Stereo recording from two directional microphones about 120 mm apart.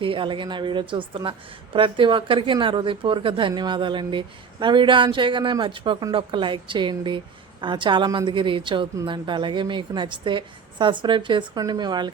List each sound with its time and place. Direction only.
0.0 s a woman's voice: 45° right (ahead or behind)